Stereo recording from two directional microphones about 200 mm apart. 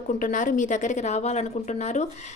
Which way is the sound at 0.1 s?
40° left (ahead or behind).